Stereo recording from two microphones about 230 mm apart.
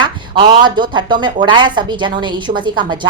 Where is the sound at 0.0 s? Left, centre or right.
Centre.